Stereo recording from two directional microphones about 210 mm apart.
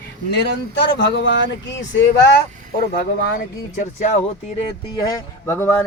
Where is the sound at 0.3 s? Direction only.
55° left (ahead or behind).